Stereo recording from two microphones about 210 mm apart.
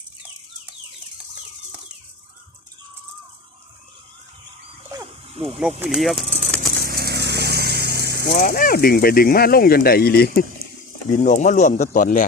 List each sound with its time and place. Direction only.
5.3 s speech: 25° right (ahead or behind)
5.8 s speech: centre (ahead or behind)
6.6 s vehicle: 45° right (ahead or behind)
8.4 s speech: 40° left (ahead or behind)
11.1 s speech: 35° left (ahead or behind)